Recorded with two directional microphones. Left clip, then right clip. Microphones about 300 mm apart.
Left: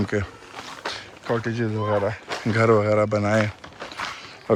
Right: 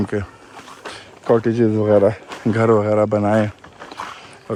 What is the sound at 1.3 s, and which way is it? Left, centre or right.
Speech, centre.